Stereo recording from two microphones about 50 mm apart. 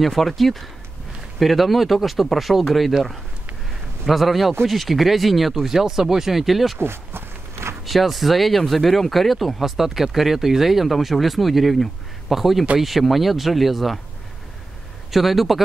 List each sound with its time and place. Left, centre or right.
0.0 s speech: centre
4.1 s speech: centre
6.8 s walk: right
7.8 s speech: centre
15.0 s speech: centre